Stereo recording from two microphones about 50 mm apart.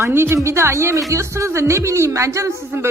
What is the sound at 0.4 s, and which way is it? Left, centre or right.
A woman's voice, right.